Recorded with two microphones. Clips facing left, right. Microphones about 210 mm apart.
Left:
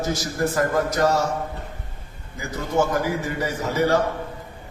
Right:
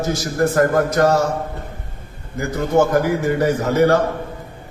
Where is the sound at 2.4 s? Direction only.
60° right (ahead or behind).